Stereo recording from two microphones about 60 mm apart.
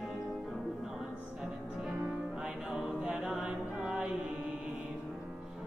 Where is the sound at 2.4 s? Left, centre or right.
Centre.